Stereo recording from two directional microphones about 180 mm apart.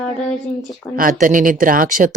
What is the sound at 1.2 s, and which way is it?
Speech, 50° right (ahead or behind).